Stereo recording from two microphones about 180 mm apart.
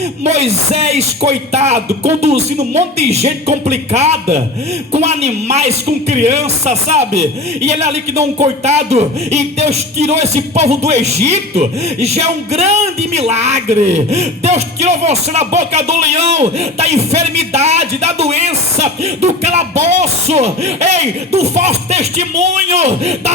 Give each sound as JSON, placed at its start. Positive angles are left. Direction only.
{"t": 0.3, "sound": "speech", "side_deg": -35}